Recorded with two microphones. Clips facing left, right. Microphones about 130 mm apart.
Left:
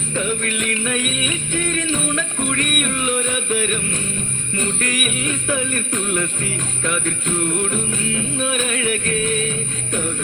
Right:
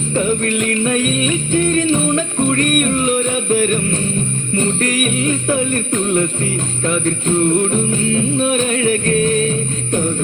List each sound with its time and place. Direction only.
0.1 s music: 35° right (ahead or behind)